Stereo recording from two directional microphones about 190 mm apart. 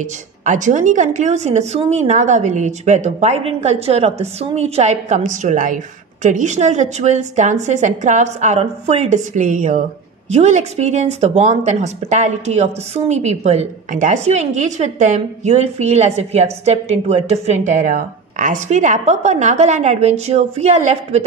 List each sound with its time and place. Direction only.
0.0 s speech: 40° right (ahead or behind)